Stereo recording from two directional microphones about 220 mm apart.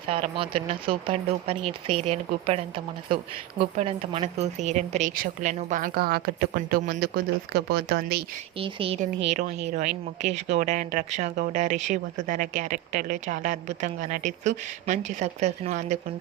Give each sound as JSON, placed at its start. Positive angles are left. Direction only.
{"t": 0.1, "sound": "speech", "side_deg": -25}
{"t": 8.5, "sound": "speech", "side_deg": -25}